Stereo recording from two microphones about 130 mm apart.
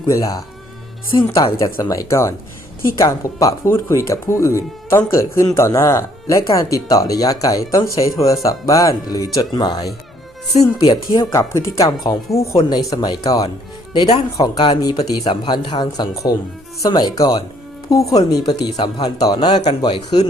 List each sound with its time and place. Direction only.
0.0 s speech: 25° left (ahead or behind)
1.5 s speech: 25° left (ahead or behind)
10.6 s speech: 45° left (ahead or behind)
11.2 s speech: 25° left (ahead or behind)